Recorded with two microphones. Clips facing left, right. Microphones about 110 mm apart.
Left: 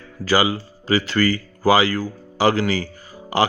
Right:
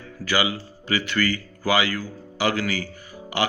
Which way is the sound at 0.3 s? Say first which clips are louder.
Left 5 dB; 35° left (ahead or behind).